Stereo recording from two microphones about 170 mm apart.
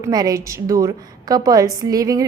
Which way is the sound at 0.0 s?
20° right (ahead or behind).